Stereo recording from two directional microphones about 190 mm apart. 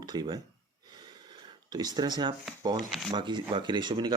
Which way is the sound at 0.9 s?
25° right (ahead or behind).